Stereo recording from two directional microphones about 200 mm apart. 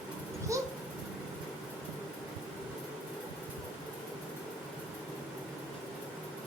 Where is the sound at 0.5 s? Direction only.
15° right (ahead or behind).